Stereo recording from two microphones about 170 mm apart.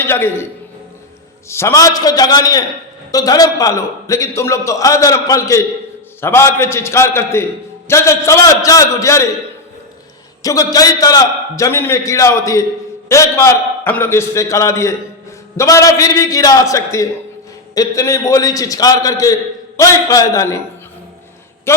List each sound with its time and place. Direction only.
0.0 s a man's voice: 15° left (ahead or behind)
1.5 s a man's voice: 15° left (ahead or behind)
10.4 s a man's voice: 20° left (ahead or behind)
21.7 s a man's voice: 15° left (ahead or behind)